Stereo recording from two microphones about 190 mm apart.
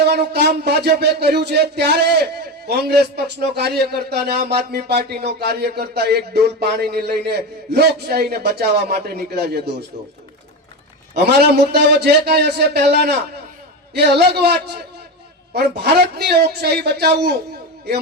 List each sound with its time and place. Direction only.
0.0 s speech: 60° right (ahead or behind)
11.1 s speech: 60° right (ahead or behind)